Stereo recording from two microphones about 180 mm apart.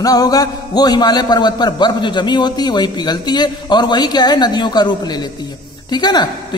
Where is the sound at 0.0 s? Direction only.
20° left (ahead or behind).